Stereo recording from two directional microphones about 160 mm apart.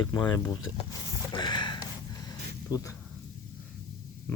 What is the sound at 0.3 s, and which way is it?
Speech, 25° left (ahead or behind).